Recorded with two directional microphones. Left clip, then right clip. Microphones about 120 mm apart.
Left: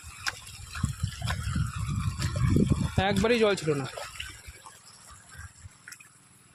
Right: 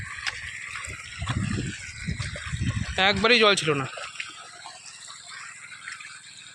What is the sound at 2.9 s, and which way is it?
Speech, 15° left (ahead or behind).